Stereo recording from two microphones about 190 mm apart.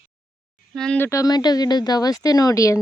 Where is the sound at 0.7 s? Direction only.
5° left (ahead or behind).